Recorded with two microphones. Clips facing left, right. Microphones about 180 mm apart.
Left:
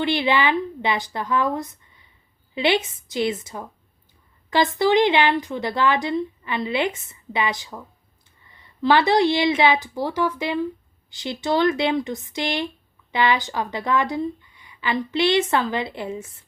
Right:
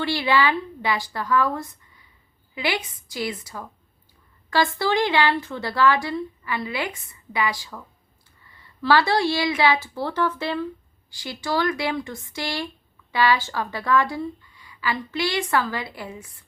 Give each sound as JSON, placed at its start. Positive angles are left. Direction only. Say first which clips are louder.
{"t": 0.0, "sound": "speech", "louder": "left 1 dB", "side_deg": 20}